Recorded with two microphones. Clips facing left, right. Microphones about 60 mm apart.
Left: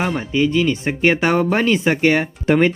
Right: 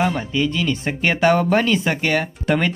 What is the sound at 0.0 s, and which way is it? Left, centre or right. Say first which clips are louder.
Speech: left 1 dB; centre.